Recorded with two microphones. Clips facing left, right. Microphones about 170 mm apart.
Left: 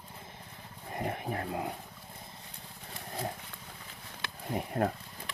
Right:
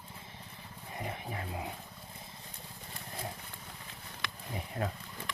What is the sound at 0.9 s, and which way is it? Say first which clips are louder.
Speech: left 6 dB; 50° left (ahead or behind).